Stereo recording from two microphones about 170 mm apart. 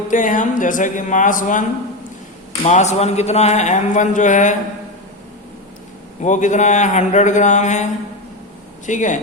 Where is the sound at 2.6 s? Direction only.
40° left (ahead or behind).